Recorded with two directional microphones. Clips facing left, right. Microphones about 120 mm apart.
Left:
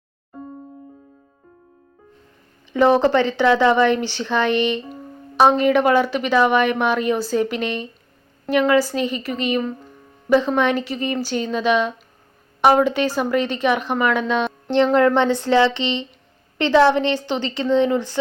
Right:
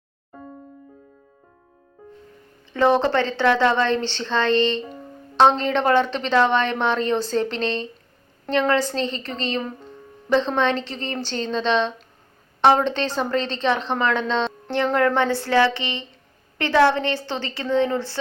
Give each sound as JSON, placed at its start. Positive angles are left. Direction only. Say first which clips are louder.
{"t": 2.7, "sound": "a woman's voice", "louder": "left 3 dB", "side_deg": 15}